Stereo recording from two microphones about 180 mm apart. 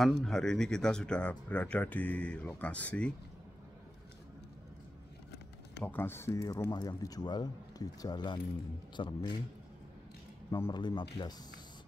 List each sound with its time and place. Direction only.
0.0 s speech: 5° left (ahead or behind)
5.9 s speech: 10° left (ahead or behind)
10.5 s speech: 20° left (ahead or behind)